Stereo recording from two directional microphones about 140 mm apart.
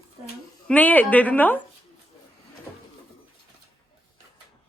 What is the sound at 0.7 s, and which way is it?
Speech, 10° left (ahead or behind).